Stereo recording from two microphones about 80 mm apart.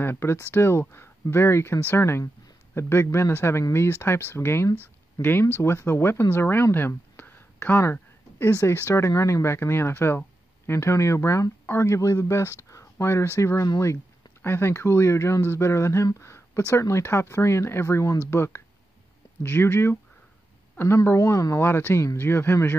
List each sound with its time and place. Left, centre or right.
0.0 s speech: left
16.2 s a sound: left
16.7 s speech: left
21.5 s speech: left